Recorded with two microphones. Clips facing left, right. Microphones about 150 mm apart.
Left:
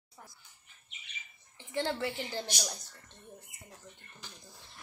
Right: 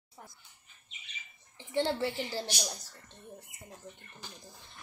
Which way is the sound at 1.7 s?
25° right (ahead or behind).